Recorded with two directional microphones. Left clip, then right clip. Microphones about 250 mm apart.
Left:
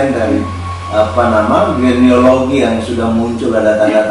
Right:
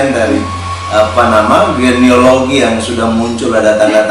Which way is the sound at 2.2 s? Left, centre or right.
Centre.